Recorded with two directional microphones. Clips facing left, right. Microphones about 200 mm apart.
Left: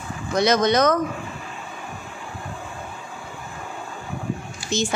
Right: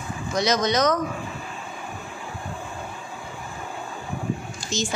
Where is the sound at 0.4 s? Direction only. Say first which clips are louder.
Left 4 dB; 55° left (ahead or behind).